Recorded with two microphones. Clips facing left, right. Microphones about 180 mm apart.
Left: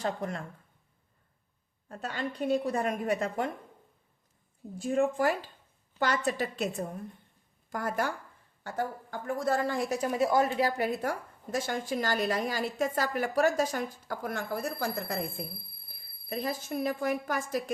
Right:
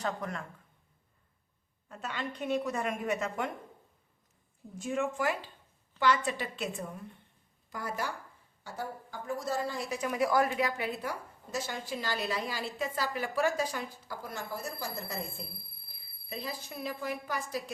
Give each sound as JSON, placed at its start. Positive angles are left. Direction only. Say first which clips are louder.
{"t": 0.0, "sound": "speech", "louder": "left 3 dB", "side_deg": 30}
{"t": 1.9, "sound": "a woman's voice", "louder": "left 3 dB", "side_deg": 40}
{"t": 4.8, "sound": "a woman's voice", "louder": "left 5 dB", "side_deg": 35}
{"t": 10.0, "sound": "a woman's voice", "louder": "left 1 dB", "side_deg": 30}